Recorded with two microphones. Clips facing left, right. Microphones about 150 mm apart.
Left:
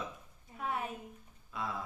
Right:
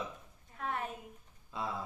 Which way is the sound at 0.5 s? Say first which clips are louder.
Left 1 dB; 5° left (ahead or behind).